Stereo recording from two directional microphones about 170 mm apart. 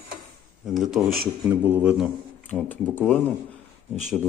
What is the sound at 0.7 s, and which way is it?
Speech, centre (ahead or behind).